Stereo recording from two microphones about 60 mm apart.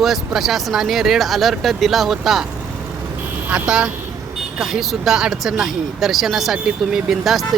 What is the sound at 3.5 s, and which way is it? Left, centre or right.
Speech, centre.